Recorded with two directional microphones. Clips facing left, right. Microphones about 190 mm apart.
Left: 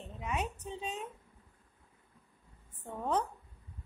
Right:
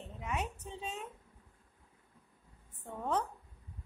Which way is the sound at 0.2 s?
20° left (ahead or behind).